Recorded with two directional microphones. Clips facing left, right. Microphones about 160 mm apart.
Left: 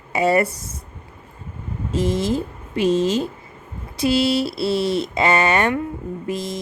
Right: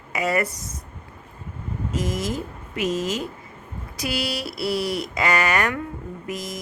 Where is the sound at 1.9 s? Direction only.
30° left (ahead or behind).